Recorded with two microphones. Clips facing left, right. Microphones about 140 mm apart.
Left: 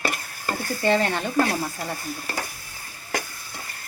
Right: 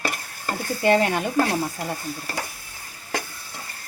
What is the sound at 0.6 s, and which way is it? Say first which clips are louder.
Speech: right 3 dB; 15° right (ahead or behind).